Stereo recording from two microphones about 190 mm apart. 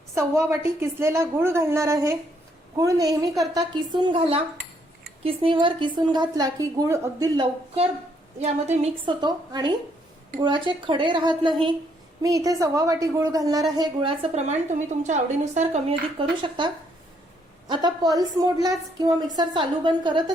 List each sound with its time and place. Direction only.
0.3 s a woman's voice: 15° right (ahead or behind)
8.4 s a woman's voice: 35° right (ahead or behind)
9.2 s a woman's voice: 20° right (ahead or behind)